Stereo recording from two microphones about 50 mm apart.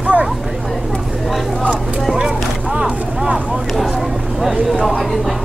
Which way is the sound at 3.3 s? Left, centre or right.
Centre.